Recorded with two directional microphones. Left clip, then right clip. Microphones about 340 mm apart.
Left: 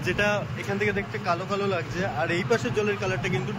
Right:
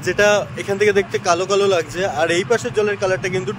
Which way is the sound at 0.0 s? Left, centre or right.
Centre.